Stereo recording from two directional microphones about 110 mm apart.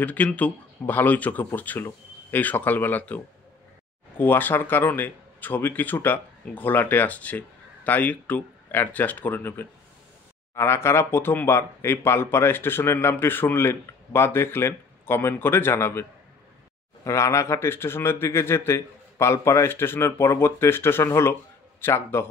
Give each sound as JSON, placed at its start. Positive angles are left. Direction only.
{"t": 0.0, "sound": "speech", "side_deg": 15}
{"t": 4.2, "sound": "speech", "side_deg": 15}